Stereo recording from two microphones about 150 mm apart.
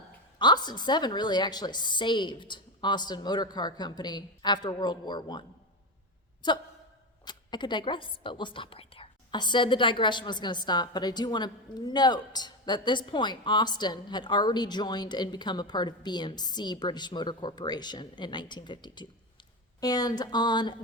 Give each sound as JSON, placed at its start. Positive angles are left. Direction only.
{"t": 0.3, "sound": "speech", "side_deg": 30}
{"t": 7.3, "sound": "speech", "side_deg": 30}